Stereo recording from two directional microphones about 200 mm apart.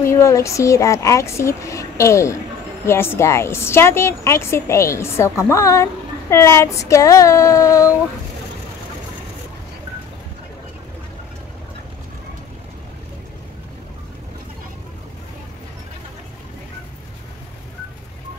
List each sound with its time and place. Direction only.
0.0 s a woman's voice: 15° left (ahead or behind)